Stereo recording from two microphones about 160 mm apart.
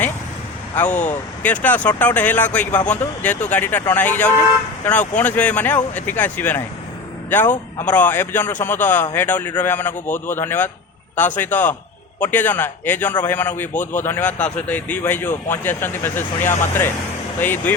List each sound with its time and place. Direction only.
0.9 s speech: 50° left (ahead or behind)
1.4 s a man's voice: 10° left (ahead or behind)